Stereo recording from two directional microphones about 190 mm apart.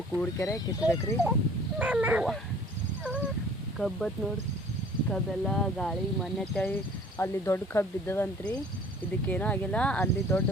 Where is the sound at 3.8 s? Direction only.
5° left (ahead or behind).